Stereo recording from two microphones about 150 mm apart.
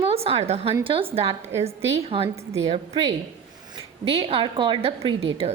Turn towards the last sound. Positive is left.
turn(degrees=-40)  # may be behind; listen again after turning